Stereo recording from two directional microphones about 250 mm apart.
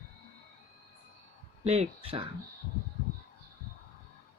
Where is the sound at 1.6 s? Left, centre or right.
Right.